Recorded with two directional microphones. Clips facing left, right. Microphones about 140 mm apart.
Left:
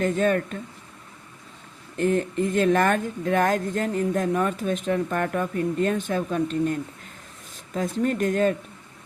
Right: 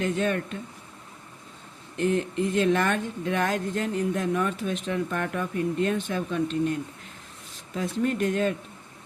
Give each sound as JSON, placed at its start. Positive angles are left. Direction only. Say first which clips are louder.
{"t": 0.0, "sound": "speech", "louder": "left 4 dB", "side_deg": 45}
{"t": 2.0, "sound": "speech", "louder": "left 2 dB", "side_deg": 45}